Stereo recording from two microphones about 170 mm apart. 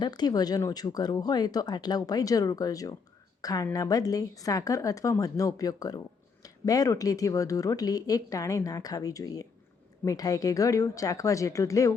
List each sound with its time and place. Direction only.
0.0 s speech: 25° left (ahead or behind)